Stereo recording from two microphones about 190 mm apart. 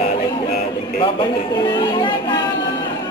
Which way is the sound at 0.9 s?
25° left (ahead or behind).